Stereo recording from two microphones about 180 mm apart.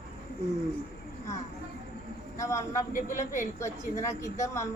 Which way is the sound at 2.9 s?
50° left (ahead or behind).